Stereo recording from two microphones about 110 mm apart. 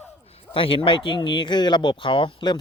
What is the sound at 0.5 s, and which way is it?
Speech, 55° left (ahead or behind).